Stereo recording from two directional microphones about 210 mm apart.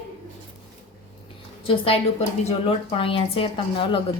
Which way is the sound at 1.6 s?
25° left (ahead or behind).